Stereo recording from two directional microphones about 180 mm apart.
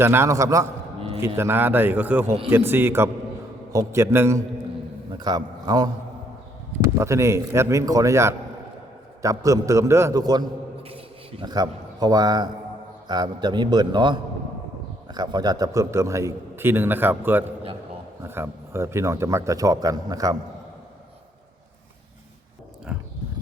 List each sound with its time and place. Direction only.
0.0 s a man's voice: 15° right (ahead or behind)
22.9 s dog: 5° right (ahead or behind)